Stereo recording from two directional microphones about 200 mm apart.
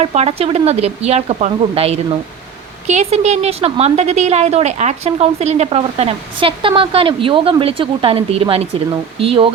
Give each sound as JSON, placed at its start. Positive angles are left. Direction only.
{"t": 0.0, "sound": "a woman's voice", "side_deg": -30}